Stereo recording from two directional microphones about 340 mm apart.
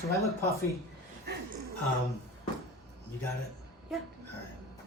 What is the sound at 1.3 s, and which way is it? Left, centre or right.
Speech, right.